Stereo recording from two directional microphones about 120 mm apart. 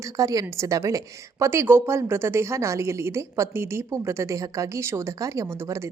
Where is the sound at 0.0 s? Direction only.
30° right (ahead or behind).